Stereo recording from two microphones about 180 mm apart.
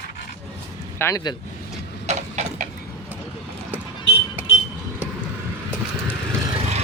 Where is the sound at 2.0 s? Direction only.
40° right (ahead or behind).